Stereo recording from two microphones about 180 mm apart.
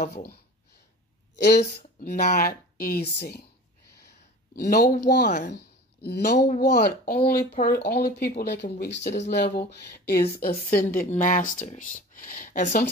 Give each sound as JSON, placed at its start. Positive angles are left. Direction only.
{"t": 0.0, "sound": "speech", "side_deg": 55}
{"t": 1.3, "sound": "speech", "side_deg": 70}
{"t": 2.0, "sound": "speech", "side_deg": 50}
{"t": 4.6, "sound": "speech", "side_deg": 55}
{"t": 5.2, "sound": "speech", "side_deg": 45}
{"t": 6.0, "sound": "speech", "side_deg": 60}
{"t": 9.4, "sound": "speech", "side_deg": 60}